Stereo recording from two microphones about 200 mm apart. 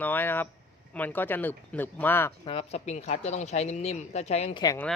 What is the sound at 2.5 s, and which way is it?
Speech, 30° left (ahead or behind).